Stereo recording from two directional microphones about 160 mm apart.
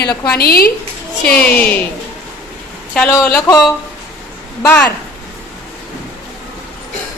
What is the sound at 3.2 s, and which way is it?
Speech, 20° left (ahead or behind).